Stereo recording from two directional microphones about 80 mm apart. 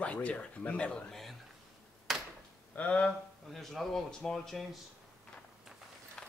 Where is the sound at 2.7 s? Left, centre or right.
Centre.